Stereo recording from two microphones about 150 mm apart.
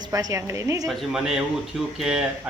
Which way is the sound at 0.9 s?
Centre (ahead or behind).